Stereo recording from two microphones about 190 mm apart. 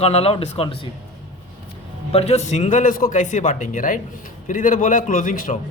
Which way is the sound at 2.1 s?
35° left (ahead or behind).